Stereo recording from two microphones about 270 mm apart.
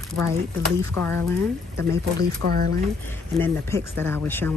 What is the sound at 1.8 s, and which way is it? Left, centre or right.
Speech, right.